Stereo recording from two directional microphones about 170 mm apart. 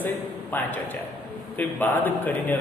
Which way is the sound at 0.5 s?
10° left (ahead or behind).